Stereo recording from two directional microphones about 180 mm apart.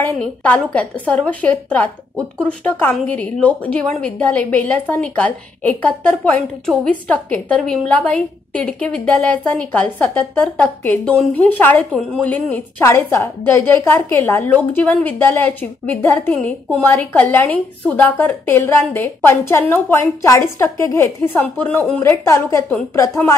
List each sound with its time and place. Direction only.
0.0 s a woman's voice: 5° left (ahead or behind)